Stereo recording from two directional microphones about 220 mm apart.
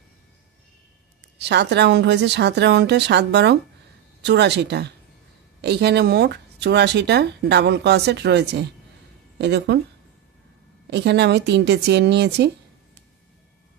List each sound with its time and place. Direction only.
1.4 s speech: 50° right (ahead or behind)
10.9 s speech: 50° right (ahead or behind)